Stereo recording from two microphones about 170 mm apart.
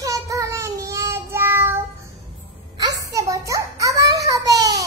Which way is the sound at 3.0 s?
20° right (ahead or behind).